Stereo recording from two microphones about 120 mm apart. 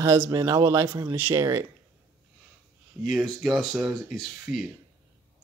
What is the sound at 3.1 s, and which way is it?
Speech, centre (ahead or behind).